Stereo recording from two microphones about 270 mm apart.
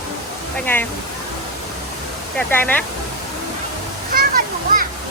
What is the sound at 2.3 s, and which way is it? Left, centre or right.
Speech, centre.